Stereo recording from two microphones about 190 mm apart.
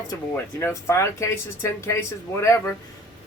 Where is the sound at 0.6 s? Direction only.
15° left (ahead or behind).